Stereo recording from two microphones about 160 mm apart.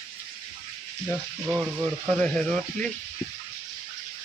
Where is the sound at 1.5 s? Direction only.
10° right (ahead or behind).